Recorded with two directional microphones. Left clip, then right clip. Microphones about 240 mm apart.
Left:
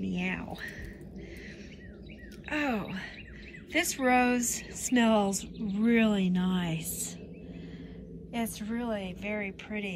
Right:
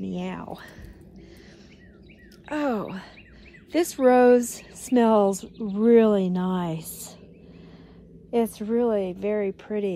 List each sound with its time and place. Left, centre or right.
0.0 s a sound: centre
2.5 s a woman's voice: centre
8.3 s a woman's voice: right